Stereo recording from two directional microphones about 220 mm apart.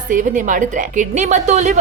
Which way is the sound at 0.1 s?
35° right (ahead or behind).